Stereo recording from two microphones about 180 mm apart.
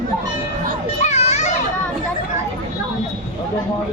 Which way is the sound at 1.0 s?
40° left (ahead or behind).